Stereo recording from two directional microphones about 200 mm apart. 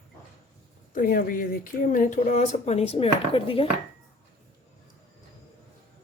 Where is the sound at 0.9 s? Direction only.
45° left (ahead or behind); by 3.6 s 25° left (ahead or behind).